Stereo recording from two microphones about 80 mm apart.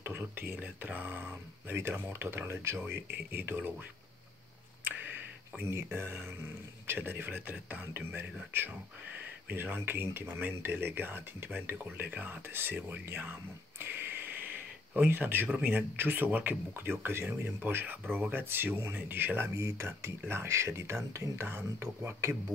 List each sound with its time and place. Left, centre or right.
0.0 s speech: right
5.7 s speech: right
16.7 s speech: right